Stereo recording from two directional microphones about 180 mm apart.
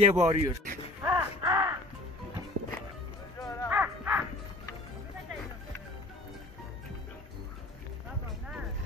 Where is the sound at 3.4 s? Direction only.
20° left (ahead or behind).